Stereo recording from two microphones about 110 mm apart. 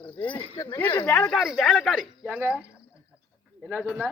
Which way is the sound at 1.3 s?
Centre (ahead or behind).